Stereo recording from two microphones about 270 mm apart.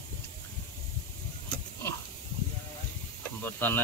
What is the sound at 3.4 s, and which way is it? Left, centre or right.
Snake, centre.